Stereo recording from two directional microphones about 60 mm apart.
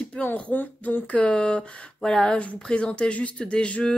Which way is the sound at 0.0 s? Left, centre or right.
Centre.